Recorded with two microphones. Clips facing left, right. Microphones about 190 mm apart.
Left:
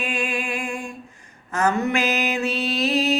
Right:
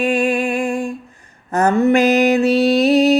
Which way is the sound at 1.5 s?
35° right (ahead or behind).